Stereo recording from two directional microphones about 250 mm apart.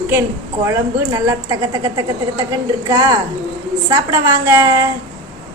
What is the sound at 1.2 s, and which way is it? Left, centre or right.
A woman's voice, centre.